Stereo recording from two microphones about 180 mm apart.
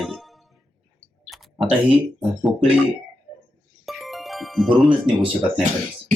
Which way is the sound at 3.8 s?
Centre (ahead or behind).